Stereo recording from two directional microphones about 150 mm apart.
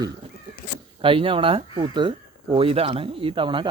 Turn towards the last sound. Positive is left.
turn(degrees=-35)  # may be behind; listen again after turning